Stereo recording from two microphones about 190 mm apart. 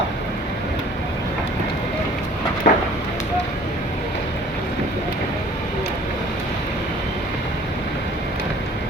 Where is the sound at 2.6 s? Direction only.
45° left (ahead or behind).